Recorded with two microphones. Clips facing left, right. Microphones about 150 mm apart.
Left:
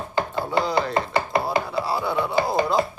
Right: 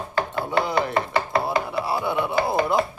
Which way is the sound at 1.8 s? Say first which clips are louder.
Even; 20° right (ahead or behind).